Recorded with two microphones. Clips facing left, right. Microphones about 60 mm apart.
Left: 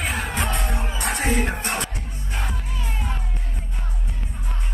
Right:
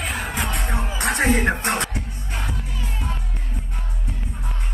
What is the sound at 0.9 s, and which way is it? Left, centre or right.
Music, right.